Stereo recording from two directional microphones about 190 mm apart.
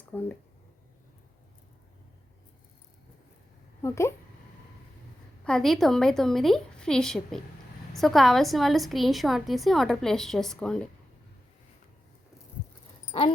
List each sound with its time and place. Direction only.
0.1 s speech: 10° left (ahead or behind)
3.8 s speech: 15° left (ahead or behind)
5.5 s a woman's voice: centre (ahead or behind)
13.1 s a sound: 25° left (ahead or behind)